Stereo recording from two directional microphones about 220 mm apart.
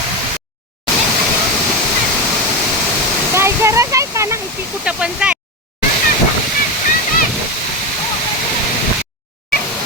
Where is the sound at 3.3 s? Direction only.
10° right (ahead or behind).